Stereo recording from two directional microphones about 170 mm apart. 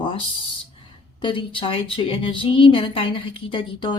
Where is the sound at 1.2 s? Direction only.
30° left (ahead or behind).